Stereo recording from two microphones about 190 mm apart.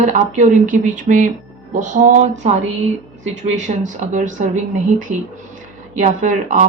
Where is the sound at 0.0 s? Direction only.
40° right (ahead or behind).